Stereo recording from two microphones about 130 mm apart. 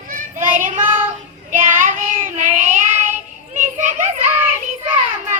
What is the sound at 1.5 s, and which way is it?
Child singing, 80° right.